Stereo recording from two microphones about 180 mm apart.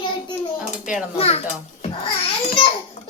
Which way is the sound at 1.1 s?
35° left (ahead or behind).